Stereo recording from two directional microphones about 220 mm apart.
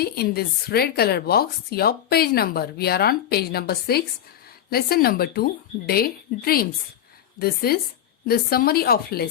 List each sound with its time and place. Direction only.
0.0 s a woman's voice: 45° left (ahead or behind)